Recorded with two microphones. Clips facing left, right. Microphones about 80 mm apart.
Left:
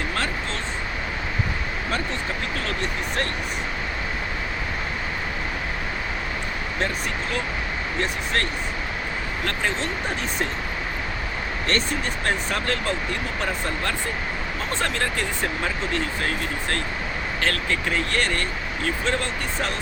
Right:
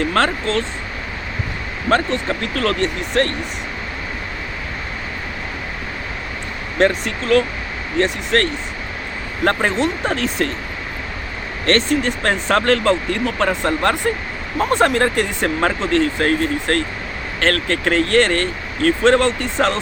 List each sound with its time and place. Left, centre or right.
0.1 s speech: right
2.4 s speech: right
6.7 s speech: right
9.4 s speech: right
11.7 s speech: right
14.6 s speech: right